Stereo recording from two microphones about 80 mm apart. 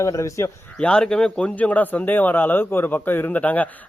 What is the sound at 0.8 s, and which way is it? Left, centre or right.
Speech, centre.